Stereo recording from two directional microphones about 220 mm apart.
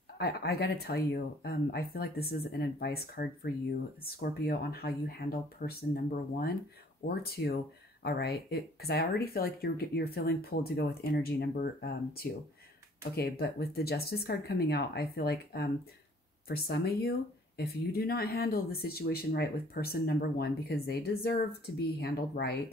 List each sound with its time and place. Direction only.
0.2 s speech: 45° left (ahead or behind)